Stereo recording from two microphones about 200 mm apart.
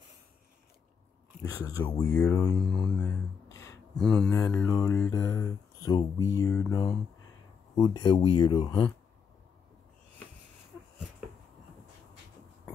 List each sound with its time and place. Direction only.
1.7 s speech: 15° left (ahead or behind)
2.6 s speech: 5° left (ahead or behind)
3.9 s speech: centre (ahead or behind); by 8.8 s 20° left (ahead or behind)